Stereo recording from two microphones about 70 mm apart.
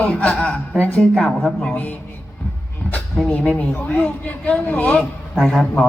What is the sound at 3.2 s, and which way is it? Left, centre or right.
A woman's voice, left.